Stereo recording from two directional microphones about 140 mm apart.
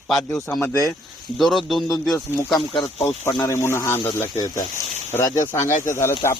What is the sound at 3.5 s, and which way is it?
Speech, 20° left (ahead or behind).